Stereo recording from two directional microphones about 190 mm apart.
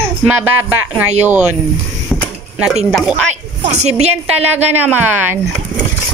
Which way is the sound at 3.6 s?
35° right (ahead or behind).